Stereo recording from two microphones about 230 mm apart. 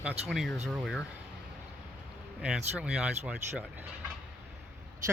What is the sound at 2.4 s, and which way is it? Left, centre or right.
Speech, centre.